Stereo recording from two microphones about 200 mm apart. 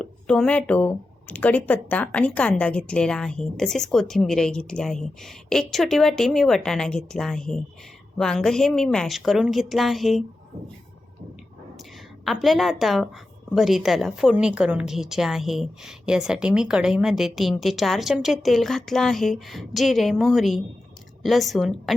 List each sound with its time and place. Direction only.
0.0 s speech: 5° left (ahead or behind)
12.2 s speech: centre (ahead or behind)